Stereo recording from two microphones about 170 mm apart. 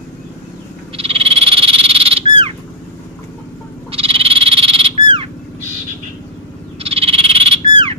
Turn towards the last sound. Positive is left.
turn(degrees=-30)  # may be behind; listen again after turning